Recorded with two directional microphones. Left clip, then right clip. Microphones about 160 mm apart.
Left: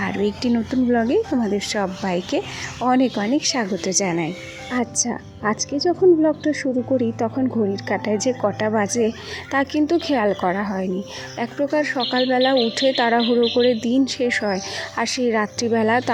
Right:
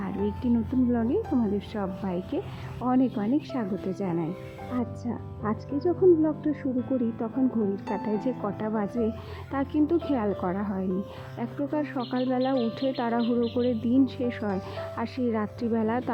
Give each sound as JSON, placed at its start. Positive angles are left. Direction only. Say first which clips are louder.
{"t": 0.0, "sound": "speech", "louder": "left 8 dB", "side_deg": 25}
{"t": 13.8, "sound": "speech", "louder": "left 6 dB", "side_deg": 10}